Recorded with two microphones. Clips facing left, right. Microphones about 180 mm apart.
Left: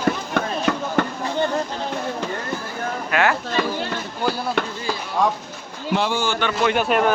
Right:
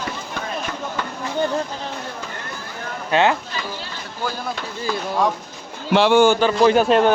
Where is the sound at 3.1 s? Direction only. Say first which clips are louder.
Right 3 dB; 25° right (ahead or behind).